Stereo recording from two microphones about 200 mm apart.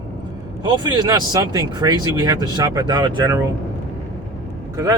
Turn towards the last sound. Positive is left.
turn(degrees=-15)  # may be behind; listen again after turning